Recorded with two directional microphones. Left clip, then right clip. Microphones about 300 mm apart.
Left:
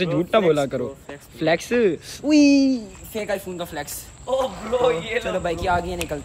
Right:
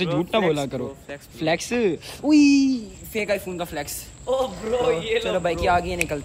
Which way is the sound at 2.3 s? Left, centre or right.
Left.